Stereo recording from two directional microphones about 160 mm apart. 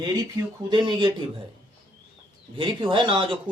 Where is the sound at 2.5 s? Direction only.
30° right (ahead or behind).